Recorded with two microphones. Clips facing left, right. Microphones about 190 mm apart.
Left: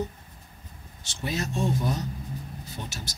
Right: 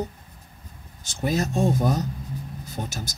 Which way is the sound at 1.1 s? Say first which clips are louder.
Right 6 dB; 45° right (ahead or behind).